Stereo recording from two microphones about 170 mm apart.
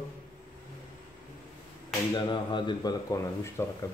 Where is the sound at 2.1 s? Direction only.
25° left (ahead or behind).